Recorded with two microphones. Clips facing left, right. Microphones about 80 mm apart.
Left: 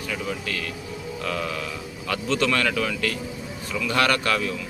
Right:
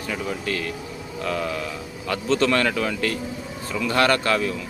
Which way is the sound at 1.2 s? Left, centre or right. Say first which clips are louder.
Right 3 dB; right.